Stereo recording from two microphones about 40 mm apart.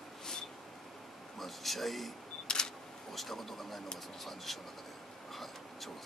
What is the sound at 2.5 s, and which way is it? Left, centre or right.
Single-lens reflex camera, centre.